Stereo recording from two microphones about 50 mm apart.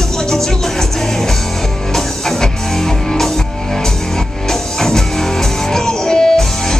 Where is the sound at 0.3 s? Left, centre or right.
Centre.